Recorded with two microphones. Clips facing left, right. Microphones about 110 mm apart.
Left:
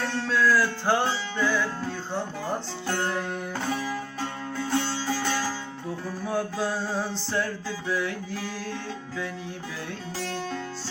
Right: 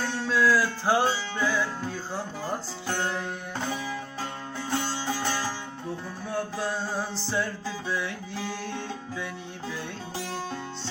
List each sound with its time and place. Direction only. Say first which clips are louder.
0.0 s music: even; 5° right (ahead or behind)
4.5 s music: left 3 dB; 15° right (ahead or behind)
6.3 s mantra: left 2 dB; 5° left (ahead or behind)
10.2 s music: left 3 dB; 10° right (ahead or behind)